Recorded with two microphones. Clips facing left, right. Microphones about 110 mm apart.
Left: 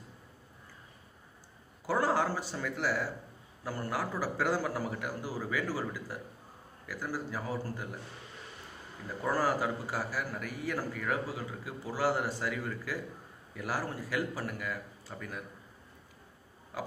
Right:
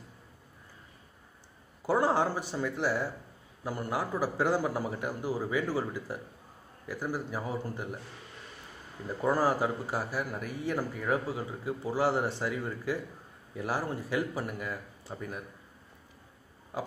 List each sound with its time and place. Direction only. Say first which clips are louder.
1.9 s a man's voice: right 3 dB; 20° right (ahead or behind)
9.2 s a man's voice: right 3 dB; 20° right (ahead or behind)
16.7 s a sound: right 3 dB; 20° right (ahead or behind)